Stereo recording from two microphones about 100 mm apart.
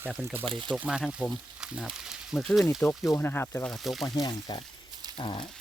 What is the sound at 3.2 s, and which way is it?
Speech, 20° left (ahead or behind).